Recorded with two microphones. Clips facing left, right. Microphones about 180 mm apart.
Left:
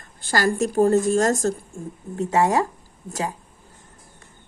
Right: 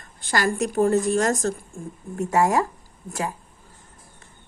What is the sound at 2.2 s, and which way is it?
Speech, 20° left (ahead or behind).